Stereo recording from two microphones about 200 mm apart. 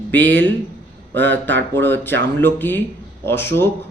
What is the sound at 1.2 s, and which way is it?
A man's voice, 10° left (ahead or behind).